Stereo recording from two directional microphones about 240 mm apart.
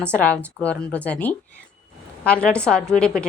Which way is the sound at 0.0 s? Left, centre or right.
Centre.